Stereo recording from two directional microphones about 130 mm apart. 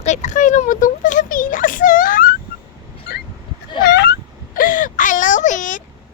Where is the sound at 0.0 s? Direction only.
65° left (ahead or behind); by 2.3 s 90° left.